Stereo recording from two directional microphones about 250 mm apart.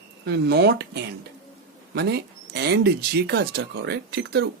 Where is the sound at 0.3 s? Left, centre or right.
Right.